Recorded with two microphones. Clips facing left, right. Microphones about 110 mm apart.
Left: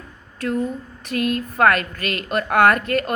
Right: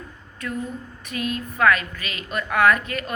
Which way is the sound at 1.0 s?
65° left (ahead or behind).